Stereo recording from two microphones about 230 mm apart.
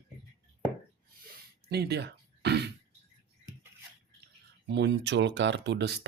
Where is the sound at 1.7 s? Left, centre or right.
Right.